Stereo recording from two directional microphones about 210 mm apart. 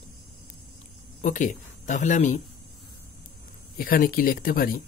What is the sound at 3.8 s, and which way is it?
Speech, 45° left (ahead or behind).